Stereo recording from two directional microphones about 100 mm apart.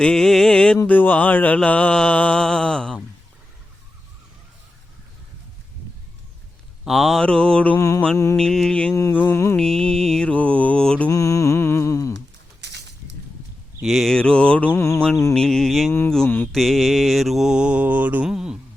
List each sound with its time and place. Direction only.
0.0 s mantra: 5° left (ahead or behind)
6.8 s mantra: centre (ahead or behind)
7.8 s mantra: 30° left (ahead or behind)
8.4 s mantra: 5° left (ahead or behind)
9.1 s mantra: 20° left (ahead or behind)
9.6 s mantra: 5° left (ahead or behind)
11.1 s mantra: 30° left (ahead or behind)
13.8 s mantra: centre (ahead or behind); by 18.3 s 15° right (ahead or behind)
18.3 s music: 5° right (ahead or behind)